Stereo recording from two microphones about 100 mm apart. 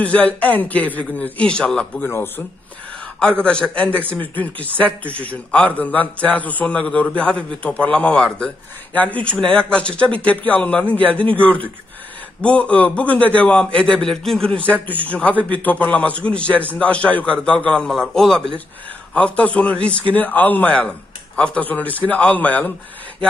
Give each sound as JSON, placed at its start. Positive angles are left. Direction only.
{"t": 0.0, "sound": "a man's voice", "side_deg": 15}
{"t": 2.0, "sound": "a man's voice", "side_deg": 20}
{"t": 3.2, "sound": "a man's voice", "side_deg": 10}